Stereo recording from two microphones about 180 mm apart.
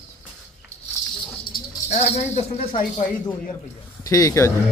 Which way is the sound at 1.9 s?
40° left (ahead or behind).